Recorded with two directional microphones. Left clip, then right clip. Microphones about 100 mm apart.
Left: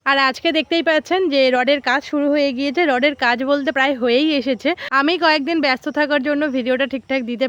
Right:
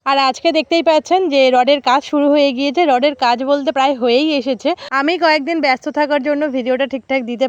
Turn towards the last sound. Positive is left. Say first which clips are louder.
# right 3 dB
turn(degrees=-30)  # may be behind; listen again after turning